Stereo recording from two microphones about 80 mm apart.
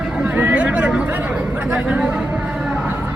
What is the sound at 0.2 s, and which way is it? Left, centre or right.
Chatter, right.